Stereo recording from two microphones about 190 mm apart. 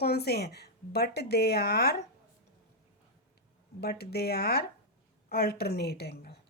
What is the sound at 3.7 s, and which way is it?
A woman's voice, 55° left (ahead or behind).